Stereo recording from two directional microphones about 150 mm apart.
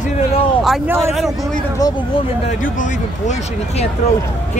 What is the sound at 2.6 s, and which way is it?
Speech, 55° left (ahead or behind).